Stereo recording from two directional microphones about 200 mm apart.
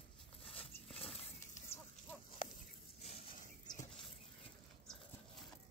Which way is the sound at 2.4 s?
25° left (ahead or behind).